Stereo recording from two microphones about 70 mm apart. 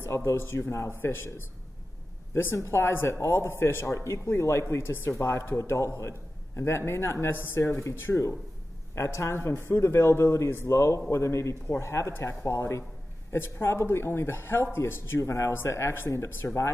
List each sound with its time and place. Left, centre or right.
0.0 s a man's voice: left
2.3 s a man's voice: left
16.4 s speech: left